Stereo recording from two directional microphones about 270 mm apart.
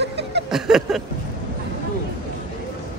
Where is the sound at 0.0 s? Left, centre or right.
Right.